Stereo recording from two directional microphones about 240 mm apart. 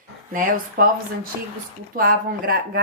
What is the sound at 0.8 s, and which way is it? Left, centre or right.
Speech, right.